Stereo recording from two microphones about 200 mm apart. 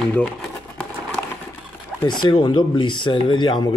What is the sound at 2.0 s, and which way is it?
Speech, 20° left (ahead or behind).